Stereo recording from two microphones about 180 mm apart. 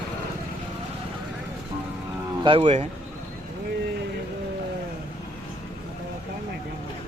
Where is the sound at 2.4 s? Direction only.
30° right (ahead or behind).